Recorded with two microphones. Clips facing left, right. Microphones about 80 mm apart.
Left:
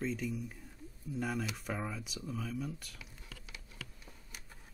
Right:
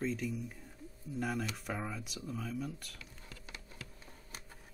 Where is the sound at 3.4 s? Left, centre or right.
Right.